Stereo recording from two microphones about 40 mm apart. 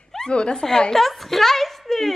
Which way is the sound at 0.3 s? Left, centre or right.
Left.